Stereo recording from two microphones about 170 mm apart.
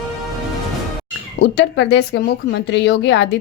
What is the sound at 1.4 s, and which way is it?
Speech, 80° left.